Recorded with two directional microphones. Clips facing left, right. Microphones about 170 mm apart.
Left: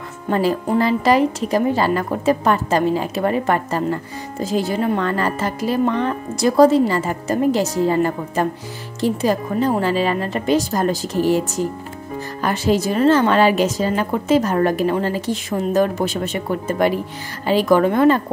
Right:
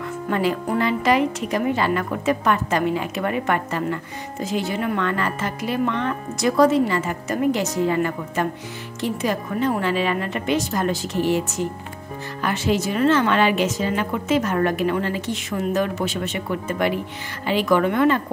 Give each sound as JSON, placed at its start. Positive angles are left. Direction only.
{"t": 0.3, "sound": "speech", "side_deg": 35}